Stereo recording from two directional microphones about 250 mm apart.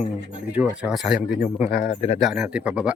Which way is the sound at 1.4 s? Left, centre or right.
Left.